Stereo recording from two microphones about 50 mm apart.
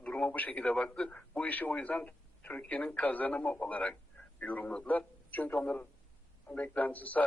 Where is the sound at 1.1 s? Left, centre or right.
Left.